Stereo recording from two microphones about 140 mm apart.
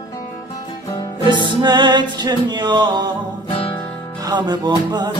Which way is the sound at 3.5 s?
40° left (ahead or behind).